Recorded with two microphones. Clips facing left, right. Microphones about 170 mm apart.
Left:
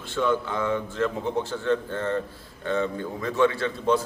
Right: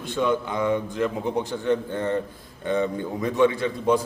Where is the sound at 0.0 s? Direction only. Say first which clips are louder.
Right 1 dB; 15° right (ahead or behind).